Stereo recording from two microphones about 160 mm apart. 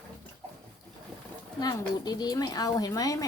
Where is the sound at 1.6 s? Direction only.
25° left (ahead or behind).